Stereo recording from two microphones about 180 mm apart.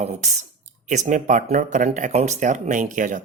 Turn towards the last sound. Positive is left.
turn(degrees=-45)  # may be behind; listen again after turning